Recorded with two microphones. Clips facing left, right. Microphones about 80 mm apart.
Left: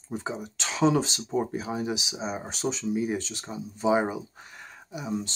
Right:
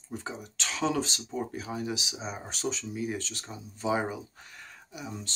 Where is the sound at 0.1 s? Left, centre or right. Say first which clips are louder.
Left 5 dB; centre.